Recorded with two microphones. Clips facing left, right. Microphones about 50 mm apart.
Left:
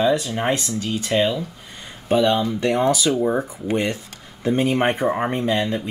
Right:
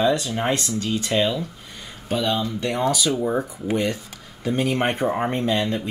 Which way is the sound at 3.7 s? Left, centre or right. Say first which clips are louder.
Left 1 dB; left.